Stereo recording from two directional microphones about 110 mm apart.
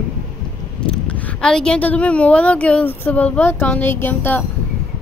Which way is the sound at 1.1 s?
10° left (ahead or behind).